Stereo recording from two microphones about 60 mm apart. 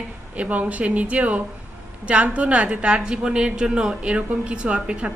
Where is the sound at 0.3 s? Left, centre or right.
Right.